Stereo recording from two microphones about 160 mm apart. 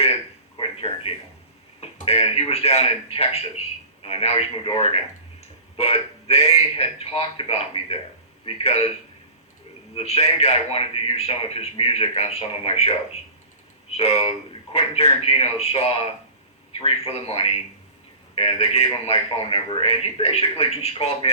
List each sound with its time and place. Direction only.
0.6 s a sound: 35° left (ahead or behind)
1.8 s a man's voice: 40° left (ahead or behind)
9.9 s a man's voice: 40° left (ahead or behind)
13.9 s a man's voice: 40° left (ahead or behind)